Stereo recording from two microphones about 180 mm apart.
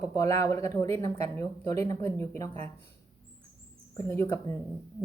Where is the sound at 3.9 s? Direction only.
15° left (ahead or behind).